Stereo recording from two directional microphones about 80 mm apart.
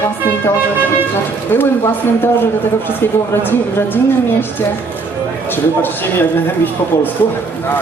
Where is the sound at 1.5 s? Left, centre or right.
Left.